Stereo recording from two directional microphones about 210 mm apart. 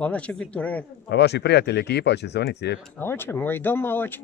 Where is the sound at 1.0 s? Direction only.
55° left (ahead or behind).